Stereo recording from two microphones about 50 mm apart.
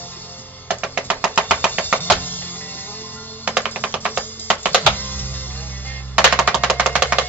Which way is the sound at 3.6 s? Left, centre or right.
Right.